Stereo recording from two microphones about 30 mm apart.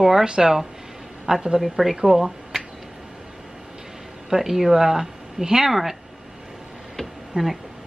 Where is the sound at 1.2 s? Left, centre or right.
Centre.